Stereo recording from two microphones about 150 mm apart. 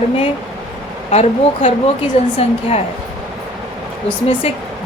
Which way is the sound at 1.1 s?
45° left (ahead or behind).